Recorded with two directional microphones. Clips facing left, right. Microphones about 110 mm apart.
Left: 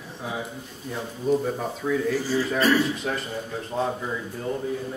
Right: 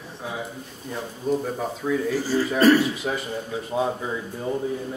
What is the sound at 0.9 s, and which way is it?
Speech, centre (ahead or behind).